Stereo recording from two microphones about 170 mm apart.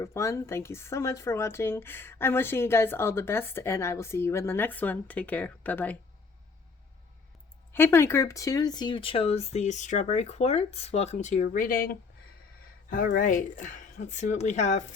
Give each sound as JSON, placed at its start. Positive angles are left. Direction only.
{"t": 0.0, "sound": "speech", "side_deg": 15}
{"t": 7.7, "sound": "speech", "side_deg": 15}